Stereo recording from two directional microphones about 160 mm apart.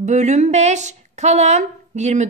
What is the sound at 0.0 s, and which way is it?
A woman's voice, 45° right (ahead or behind).